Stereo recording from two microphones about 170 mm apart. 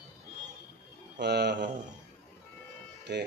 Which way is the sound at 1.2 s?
75° right (ahead or behind).